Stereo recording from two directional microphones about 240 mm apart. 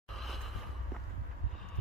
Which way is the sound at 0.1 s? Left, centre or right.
Centre.